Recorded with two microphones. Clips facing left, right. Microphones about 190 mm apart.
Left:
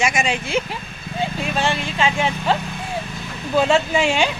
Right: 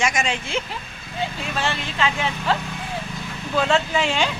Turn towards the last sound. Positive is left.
turn(degrees=10)  # may be behind; listen again after turning